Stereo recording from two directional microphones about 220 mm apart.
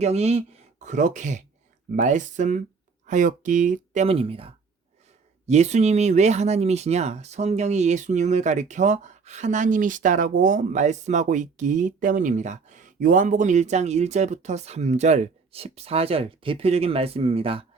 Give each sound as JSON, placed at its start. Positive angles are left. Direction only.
{"t": 0.0, "sound": "speech", "side_deg": -30}